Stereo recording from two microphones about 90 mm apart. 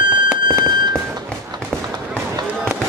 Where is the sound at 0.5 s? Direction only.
55° right (ahead or behind).